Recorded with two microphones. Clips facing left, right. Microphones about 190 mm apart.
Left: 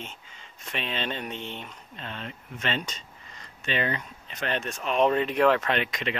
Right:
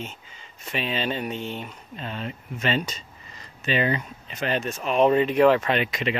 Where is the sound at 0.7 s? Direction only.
5° right (ahead or behind).